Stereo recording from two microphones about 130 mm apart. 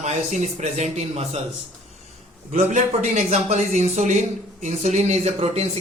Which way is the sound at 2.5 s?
65° right (ahead or behind).